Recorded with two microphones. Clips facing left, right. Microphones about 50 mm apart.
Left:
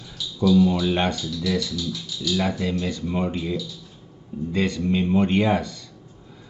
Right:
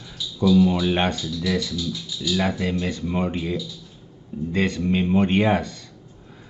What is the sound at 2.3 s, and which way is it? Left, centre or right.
Speech, right.